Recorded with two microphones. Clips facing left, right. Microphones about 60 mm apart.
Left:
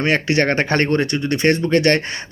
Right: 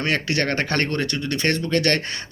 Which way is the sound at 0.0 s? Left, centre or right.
Left.